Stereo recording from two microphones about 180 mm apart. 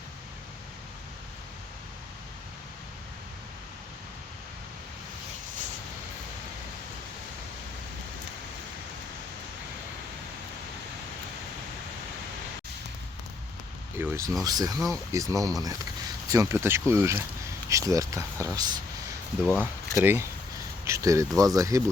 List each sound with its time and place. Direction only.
13.9 s speech: 15° right (ahead or behind)
19.5 s speech: 5° left (ahead or behind)
20.0 s speech: 15° right (ahead or behind)